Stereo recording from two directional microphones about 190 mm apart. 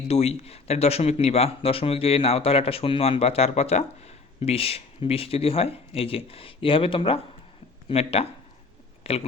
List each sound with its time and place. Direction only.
0.1 s speech: 35° left (ahead or behind)